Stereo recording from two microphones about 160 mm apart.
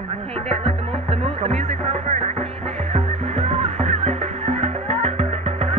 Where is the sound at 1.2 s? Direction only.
40° right (ahead or behind).